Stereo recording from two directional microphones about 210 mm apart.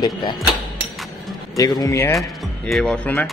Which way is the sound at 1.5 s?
15° left (ahead or behind).